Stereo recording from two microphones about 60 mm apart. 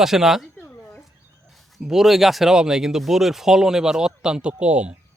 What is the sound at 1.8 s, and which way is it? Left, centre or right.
Speech, centre.